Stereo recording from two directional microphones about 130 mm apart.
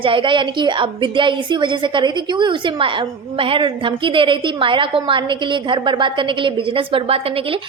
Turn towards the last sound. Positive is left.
turn(degrees=-45)  # may be behind; listen again after turning